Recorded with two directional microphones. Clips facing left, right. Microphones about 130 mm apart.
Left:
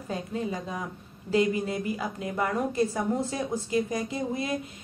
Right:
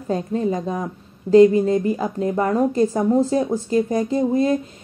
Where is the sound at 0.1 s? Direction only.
40° right (ahead or behind).